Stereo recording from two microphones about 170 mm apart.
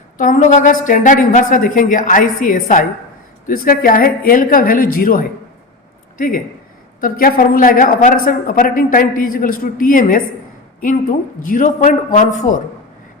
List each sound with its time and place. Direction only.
0.2 s a woman's voice: 50° left (ahead or behind)
11.4 s a woman's voice: 50° left (ahead or behind)